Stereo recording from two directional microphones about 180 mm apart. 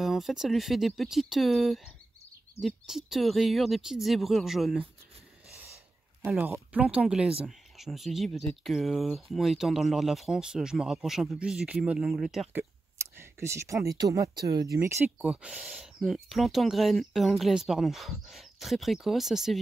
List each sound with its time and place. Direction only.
0.0 s speech: centre (ahead or behind)
6.2 s speech: 10° right (ahead or behind)
12.9 s speech: 15° right (ahead or behind)